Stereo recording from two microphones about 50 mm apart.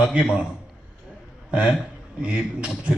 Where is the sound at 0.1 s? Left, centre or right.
Right.